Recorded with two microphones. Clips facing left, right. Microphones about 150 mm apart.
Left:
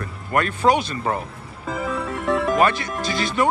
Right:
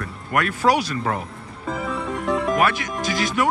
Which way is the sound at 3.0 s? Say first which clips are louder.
Right 2 dB; 15° right (ahead or behind).